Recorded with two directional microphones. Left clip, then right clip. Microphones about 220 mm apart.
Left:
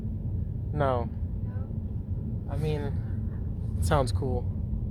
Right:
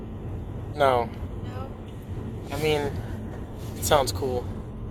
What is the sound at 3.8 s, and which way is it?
Speech, 15° left (ahead or behind).